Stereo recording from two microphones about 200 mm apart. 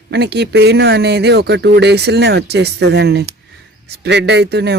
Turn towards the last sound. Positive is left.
turn(degrees=-55)  # may be behind; listen again after turning